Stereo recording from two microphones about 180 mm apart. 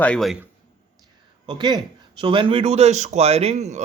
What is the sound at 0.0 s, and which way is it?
Speech, 5° left (ahead or behind).